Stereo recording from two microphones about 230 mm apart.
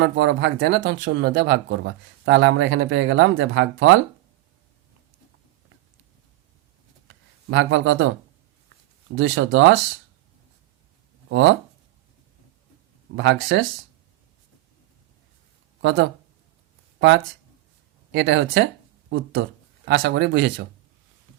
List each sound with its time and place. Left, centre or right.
0.0 s speech: right
7.1 s speech: right
9.1 s speech: right
11.3 s speech: right
13.1 s speech: right
15.8 s speech: right
18.1 s speech: right